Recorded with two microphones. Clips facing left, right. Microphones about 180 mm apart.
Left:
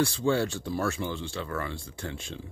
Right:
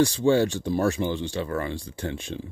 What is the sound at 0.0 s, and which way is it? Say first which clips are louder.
Speech: right 6 dB; 20° right (ahead or behind).